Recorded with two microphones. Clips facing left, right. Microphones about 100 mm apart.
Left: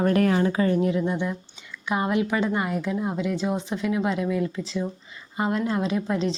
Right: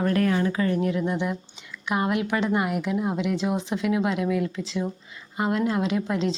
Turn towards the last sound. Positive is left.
turn(degrees=0)  # may be behind; listen again after turning